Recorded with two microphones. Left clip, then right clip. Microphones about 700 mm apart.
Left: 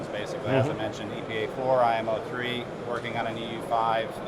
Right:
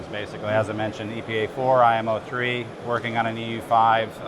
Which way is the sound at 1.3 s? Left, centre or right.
Right.